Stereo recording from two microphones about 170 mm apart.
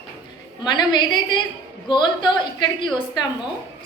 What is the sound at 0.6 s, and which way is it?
A woman's voice, 25° left (ahead or behind).